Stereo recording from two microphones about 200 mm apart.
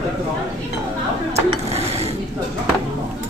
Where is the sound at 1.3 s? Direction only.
30° right (ahead or behind).